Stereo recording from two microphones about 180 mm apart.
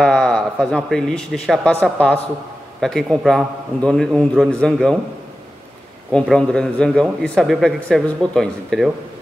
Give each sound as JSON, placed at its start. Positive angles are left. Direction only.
{"t": 0.0, "sound": "speech", "side_deg": 5}
{"t": 6.1, "sound": "speech", "side_deg": 5}